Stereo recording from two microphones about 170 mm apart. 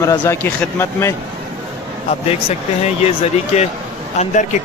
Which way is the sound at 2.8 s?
40° left (ahead or behind).